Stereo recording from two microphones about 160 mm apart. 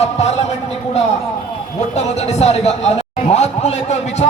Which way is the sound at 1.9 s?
45° left (ahead or behind).